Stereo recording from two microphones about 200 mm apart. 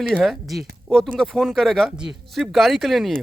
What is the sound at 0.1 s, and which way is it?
Speech, centre (ahead or behind).